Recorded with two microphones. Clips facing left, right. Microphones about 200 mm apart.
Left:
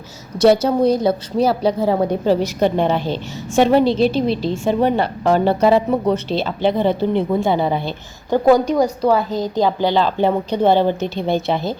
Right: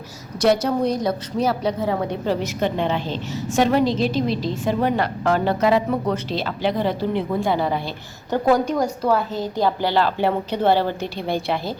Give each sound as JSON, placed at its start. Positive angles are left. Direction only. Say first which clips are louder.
{"t": 0.4, "sound": "a woman's voice", "louder": "left 5 dB", "side_deg": 30}
{"t": 3.5, "sound": "speech", "louder": "left 4 dB", "side_deg": 30}
{"t": 8.7, "sound": "a woman's voice", "louder": "left 4 dB", "side_deg": 15}